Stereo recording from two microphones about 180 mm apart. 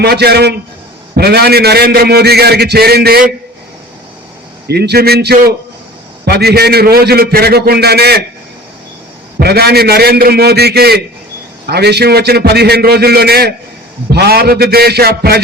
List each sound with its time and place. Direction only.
0.0 s a man's voice: 65° right (ahead or behind)
4.7 s a man's voice: 65° right (ahead or behind)
9.4 s a man's voice: 60° right (ahead or behind)